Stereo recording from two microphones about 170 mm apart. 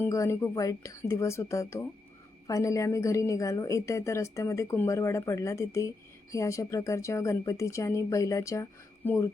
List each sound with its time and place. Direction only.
0.0 s a woman's voice: 15° left (ahead or behind)